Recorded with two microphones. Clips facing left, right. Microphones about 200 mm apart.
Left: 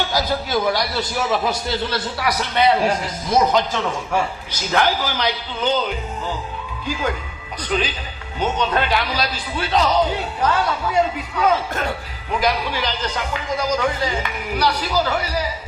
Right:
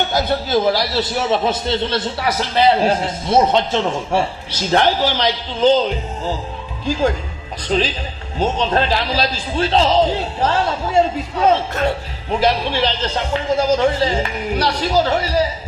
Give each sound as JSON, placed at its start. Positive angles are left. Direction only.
{"t": 0.0, "sound": "speech", "side_deg": -25}